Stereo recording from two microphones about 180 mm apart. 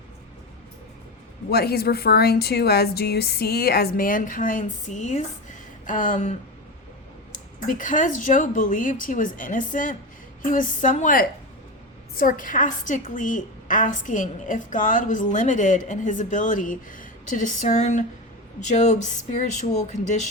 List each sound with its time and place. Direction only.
1.5 s a woman's voice: 60° left (ahead or behind); by 6.3 s 45° left (ahead or behind)
7.3 s a woman's voice: 50° left (ahead or behind)